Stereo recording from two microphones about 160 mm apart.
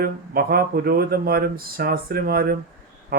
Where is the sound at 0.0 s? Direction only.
70° right (ahead or behind).